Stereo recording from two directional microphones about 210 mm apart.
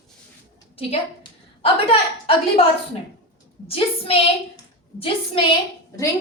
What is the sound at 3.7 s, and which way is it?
A woman's voice, 25° left (ahead or behind).